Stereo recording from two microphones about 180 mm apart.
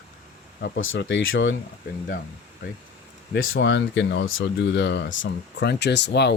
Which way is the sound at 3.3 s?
80° left.